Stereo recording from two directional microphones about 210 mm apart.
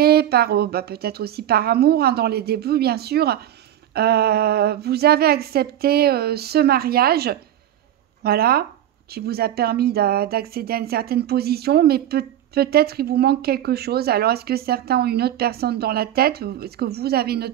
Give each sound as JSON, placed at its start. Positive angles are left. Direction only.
{"t": 0.0, "sound": "speech", "side_deg": -50}